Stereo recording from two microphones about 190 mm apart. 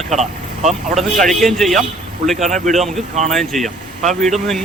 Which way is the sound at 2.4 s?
40° right (ahead or behind).